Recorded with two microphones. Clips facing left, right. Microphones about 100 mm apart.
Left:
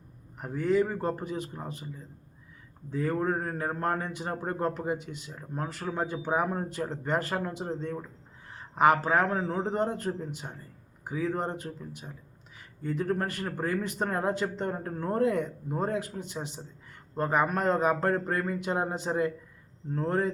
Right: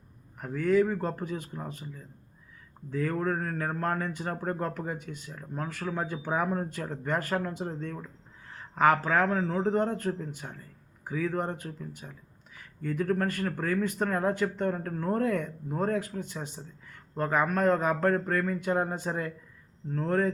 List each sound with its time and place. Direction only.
0.3 s a man's voice: 20° left (ahead or behind)